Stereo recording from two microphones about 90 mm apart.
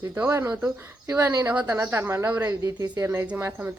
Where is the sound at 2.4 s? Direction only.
40° right (ahead or behind).